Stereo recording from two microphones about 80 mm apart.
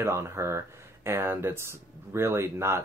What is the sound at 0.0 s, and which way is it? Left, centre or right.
Speech, right.